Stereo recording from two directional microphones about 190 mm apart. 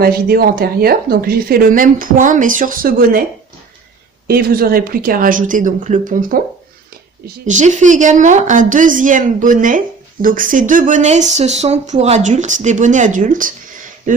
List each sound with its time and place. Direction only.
0.0 s speech: 55° right (ahead or behind)
4.3 s a woman's voice: 50° right (ahead or behind)